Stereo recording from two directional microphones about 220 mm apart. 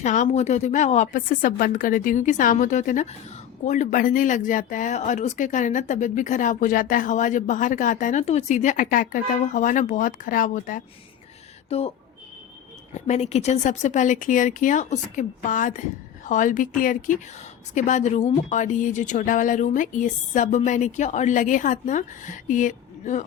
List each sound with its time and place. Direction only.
0.0 s speech: 35° left (ahead or behind)
12.9 s speech: 30° left (ahead or behind)